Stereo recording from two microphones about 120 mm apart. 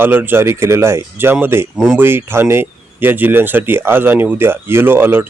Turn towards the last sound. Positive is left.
turn(degrees=-20)  # may be behind; listen again after turning